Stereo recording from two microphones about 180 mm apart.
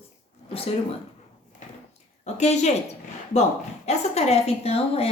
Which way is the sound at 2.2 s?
40° left (ahead or behind).